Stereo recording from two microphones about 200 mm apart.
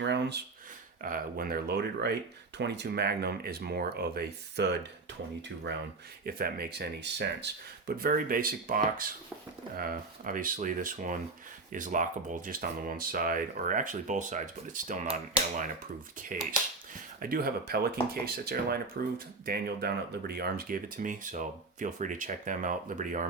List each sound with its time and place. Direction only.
0.0 s speech: 60° right (ahead or behind)
1.0 s speech: 45° right (ahead or behind)
6.2 s speech: 50° right (ahead or behind)
16.3 s speech: 40° right (ahead or behind)